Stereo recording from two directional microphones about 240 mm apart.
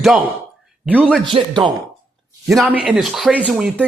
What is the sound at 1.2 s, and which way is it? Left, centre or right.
Speech, centre.